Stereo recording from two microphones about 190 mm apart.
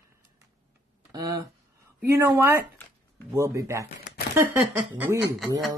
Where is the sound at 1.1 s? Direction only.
20° right (ahead or behind).